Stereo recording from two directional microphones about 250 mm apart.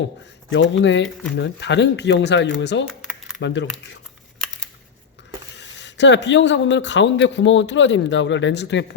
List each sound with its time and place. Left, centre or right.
0.5 s speech: left
5.5 s speech: left